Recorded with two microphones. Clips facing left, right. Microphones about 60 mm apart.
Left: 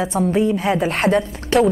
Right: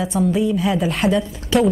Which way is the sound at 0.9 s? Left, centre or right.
Left.